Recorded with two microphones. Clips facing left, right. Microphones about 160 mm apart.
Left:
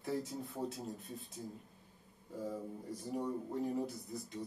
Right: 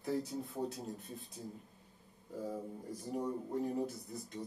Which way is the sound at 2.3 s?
Centre (ahead or behind).